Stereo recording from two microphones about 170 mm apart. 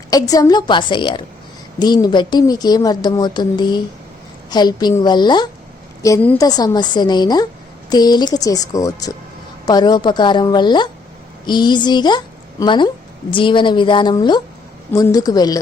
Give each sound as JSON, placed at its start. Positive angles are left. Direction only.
{"t": 0.1, "sound": "a woman's voice", "side_deg": 20}